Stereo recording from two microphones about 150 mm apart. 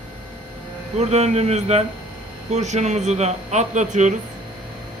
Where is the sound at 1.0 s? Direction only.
45° right (ahead or behind).